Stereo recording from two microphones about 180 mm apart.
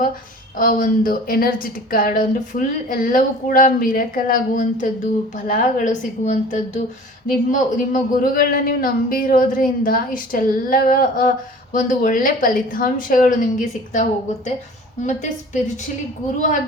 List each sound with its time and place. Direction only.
0.5 s a man's voice: 50° left (ahead or behind)